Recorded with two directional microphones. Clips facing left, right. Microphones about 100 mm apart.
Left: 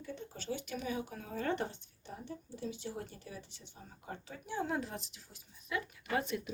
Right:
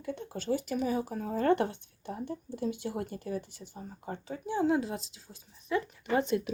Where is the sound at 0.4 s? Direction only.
40° right (ahead or behind).